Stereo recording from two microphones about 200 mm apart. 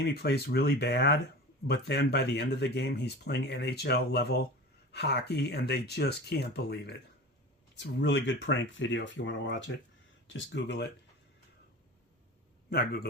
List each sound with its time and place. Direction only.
0.0 s speech: 55° left (ahead or behind)
12.7 s a man's voice: 50° left (ahead or behind)